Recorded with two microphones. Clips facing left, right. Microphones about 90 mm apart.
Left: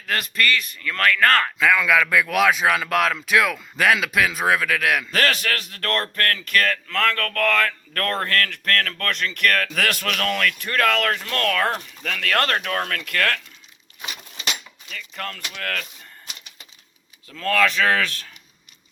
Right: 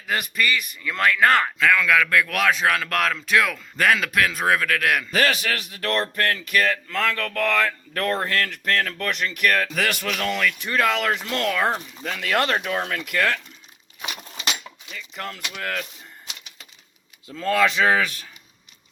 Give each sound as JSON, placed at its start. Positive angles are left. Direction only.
{"t": 0.0, "sound": "speech", "side_deg": -10}
{"t": 1.5, "sound": "speech", "side_deg": 10}
{"t": 14.8, "sound": "speech", "side_deg": -10}
{"t": 17.2, "sound": "speech", "side_deg": -15}